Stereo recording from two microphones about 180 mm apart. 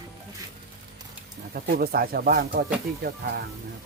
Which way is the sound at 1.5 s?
55° right (ahead or behind).